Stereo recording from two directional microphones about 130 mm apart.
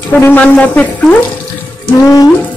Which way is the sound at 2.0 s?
30° left (ahead or behind).